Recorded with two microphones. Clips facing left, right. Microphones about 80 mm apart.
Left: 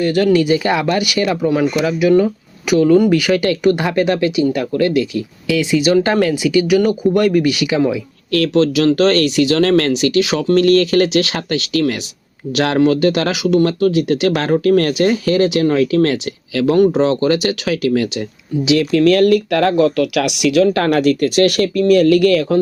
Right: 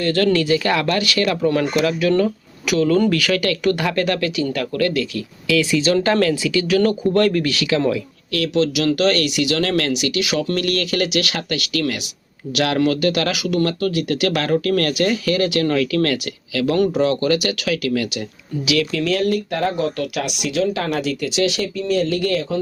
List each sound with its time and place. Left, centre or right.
0.0 s speech: centre
8.3 s speech: left
18.9 s speech: left